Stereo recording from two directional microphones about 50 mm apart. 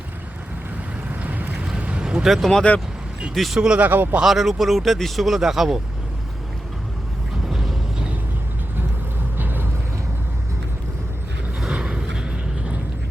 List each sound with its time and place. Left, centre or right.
1.1 s boat: right
1.5 s boat: centre
1.8 s a sound: right
2.2 s speech: centre
3.8 s speech: right
4.2 s speech: centre
7.5 s a sound: centre
9.4 s vehicle: right
11.7 s a sound: centre